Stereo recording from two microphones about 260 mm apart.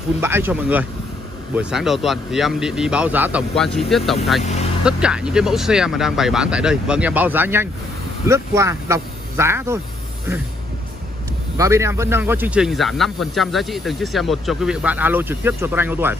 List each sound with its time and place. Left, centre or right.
0.2 s speech: centre
4.4 s speech: left
4.8 s speech: centre
11.5 s speech: centre